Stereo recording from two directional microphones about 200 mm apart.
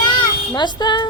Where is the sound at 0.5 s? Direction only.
20° left (ahead or behind).